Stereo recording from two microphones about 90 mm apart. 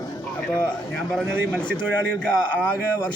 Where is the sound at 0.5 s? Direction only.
10° left (ahead or behind).